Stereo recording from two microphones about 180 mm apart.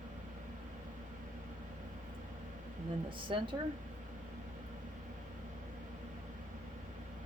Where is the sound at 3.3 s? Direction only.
30° right (ahead or behind).